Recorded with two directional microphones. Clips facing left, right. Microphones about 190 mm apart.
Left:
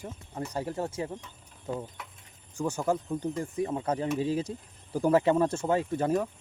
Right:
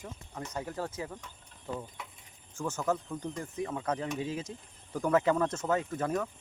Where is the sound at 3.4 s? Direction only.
30° left (ahead or behind).